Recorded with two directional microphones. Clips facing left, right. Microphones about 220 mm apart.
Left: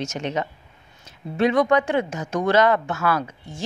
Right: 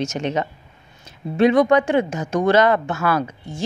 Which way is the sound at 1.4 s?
20° right (ahead or behind).